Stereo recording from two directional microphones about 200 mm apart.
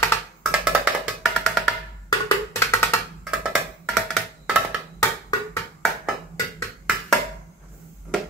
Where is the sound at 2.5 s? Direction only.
15° left (ahead or behind).